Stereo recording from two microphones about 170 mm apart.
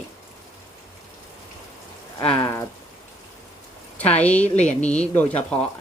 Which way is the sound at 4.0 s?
10° left (ahead or behind).